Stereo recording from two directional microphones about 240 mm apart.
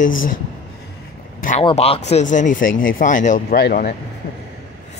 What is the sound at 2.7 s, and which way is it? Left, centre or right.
Speech, left.